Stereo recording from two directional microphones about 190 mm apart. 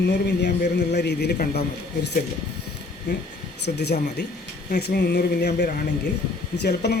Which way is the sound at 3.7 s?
60° left (ahead or behind).